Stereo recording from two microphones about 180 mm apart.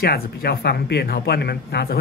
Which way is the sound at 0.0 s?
60° left (ahead or behind).